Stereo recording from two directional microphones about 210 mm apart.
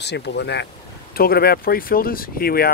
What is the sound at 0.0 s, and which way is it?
Speech, 55° left (ahead or behind).